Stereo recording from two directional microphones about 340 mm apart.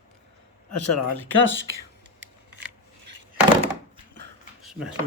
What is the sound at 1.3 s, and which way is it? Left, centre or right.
Speech, left.